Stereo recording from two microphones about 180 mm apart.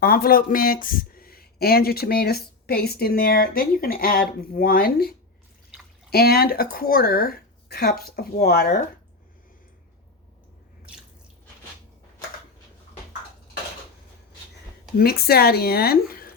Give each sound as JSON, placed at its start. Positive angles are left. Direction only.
{"t": 0.0, "sound": "speech", "side_deg": 55}
{"t": 14.9, "sound": "speech", "side_deg": 60}